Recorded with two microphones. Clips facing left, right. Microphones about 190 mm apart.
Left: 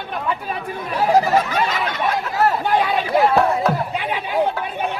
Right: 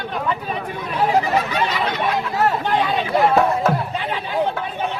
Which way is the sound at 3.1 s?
Centre (ahead or behind).